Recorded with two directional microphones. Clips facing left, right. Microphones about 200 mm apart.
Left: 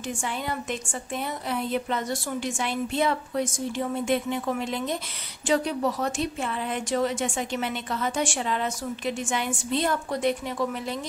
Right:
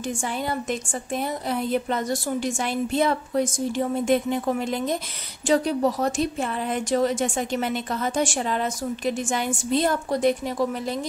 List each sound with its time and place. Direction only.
0.2 s a woman's voice: 40° right (ahead or behind)